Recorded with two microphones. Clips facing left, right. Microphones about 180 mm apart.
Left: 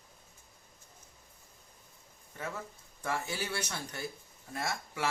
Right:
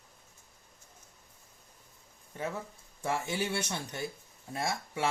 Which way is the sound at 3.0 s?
20° right (ahead or behind).